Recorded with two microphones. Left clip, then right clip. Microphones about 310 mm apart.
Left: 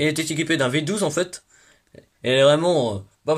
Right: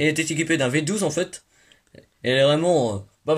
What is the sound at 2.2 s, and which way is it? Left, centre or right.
Speech, left.